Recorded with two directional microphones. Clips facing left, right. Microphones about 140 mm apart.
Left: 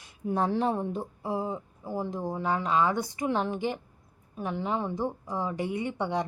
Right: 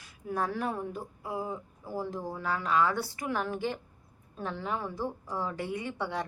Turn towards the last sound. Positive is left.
turn(degrees=20)  # may be behind; listen again after turning